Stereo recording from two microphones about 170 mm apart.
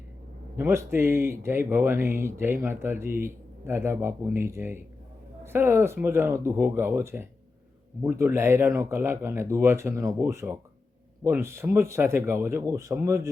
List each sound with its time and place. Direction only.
0.5 s speech: 15° right (ahead or behind)